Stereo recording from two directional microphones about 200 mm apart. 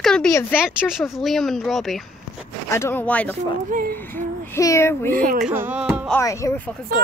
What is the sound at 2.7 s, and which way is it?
Speech, 10° left (ahead or behind).